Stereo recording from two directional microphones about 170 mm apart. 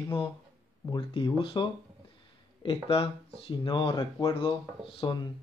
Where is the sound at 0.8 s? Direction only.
30° left (ahead or behind).